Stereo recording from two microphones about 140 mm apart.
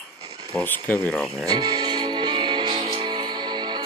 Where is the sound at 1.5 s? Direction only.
30° right (ahead or behind).